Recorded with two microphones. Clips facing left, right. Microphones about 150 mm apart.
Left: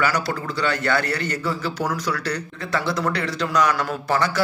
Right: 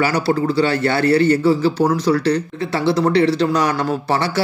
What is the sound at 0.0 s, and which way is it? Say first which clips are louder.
Speech: right 6 dB; 30° right (ahead or behind).